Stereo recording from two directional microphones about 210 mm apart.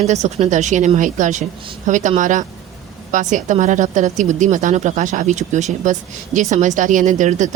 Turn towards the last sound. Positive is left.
turn(degrees=-35)  # may be behind; listen again after turning